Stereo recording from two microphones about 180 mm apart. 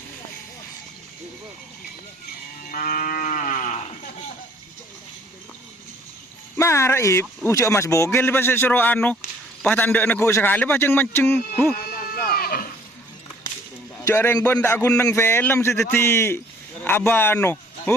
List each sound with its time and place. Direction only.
2.6 s livestock: 50° left (ahead or behind)
6.6 s a man's voice: 15° left (ahead or behind)
12.1 s sheep: 55° left (ahead or behind)
14.0 s a man's voice: 15° left (ahead or behind)